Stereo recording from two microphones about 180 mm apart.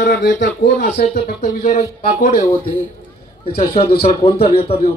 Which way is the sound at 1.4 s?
40° left (ahead or behind).